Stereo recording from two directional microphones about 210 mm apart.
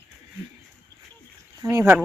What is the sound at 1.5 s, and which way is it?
Speech, 15° right (ahead or behind).